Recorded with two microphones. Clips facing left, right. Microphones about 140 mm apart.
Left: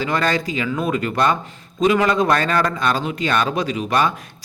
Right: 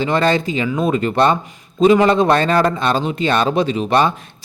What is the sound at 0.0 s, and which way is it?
A man's voice, 25° right (ahead or behind).